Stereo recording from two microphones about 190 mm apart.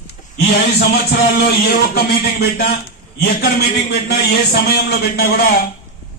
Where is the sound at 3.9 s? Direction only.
60° left (ahead or behind).